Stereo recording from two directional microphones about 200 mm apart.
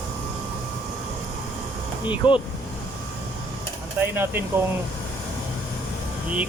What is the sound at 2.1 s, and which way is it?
Speech, 25° left (ahead or behind).